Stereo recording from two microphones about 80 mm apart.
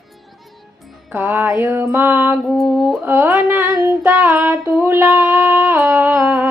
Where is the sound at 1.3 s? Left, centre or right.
Right.